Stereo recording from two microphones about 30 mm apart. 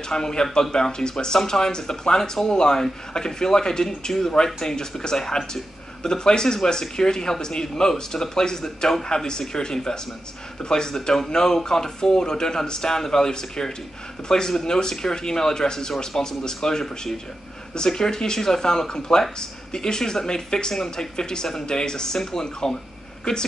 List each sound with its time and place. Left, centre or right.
0.1 s speech: left